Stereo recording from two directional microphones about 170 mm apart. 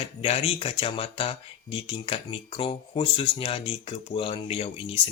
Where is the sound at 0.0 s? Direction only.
35° left (ahead or behind).